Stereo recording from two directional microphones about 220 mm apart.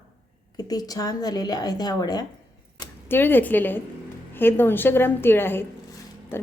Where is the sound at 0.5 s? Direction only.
15° left (ahead or behind).